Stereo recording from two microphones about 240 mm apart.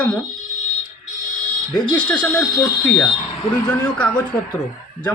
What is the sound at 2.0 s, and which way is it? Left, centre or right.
Speech, centre.